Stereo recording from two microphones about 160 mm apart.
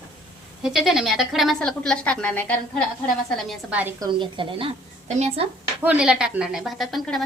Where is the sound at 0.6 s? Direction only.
Centre (ahead or behind).